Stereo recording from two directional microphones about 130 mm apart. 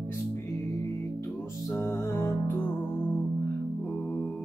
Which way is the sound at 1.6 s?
20° left (ahead or behind).